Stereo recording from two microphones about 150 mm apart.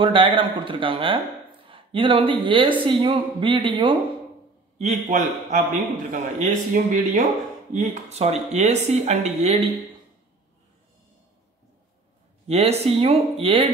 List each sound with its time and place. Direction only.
0.0 s speech: 35° right (ahead or behind)
4.7 s speech: 50° right (ahead or behind)
7.9 s speech: 45° right (ahead or behind)
12.4 s speech: 45° right (ahead or behind)